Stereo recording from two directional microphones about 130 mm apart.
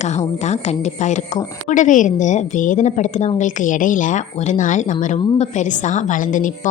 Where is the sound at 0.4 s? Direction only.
60° left (ahead or behind).